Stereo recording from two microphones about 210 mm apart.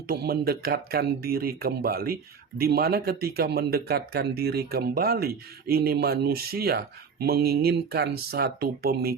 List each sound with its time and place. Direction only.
0.1 s speech: 45° right (ahead or behind)